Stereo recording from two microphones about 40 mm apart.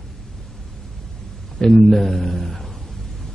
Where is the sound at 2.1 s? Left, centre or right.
Centre.